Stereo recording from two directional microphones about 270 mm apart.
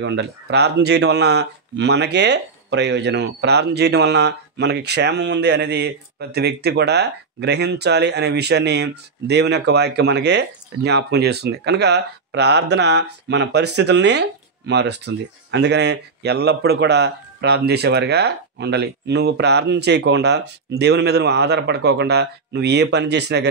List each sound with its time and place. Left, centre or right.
0.0 s speech: right